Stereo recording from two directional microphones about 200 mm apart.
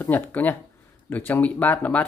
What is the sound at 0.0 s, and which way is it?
Speech, 10° left (ahead or behind).